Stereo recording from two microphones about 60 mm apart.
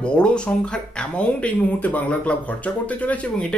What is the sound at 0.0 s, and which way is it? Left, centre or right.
Speech, centre.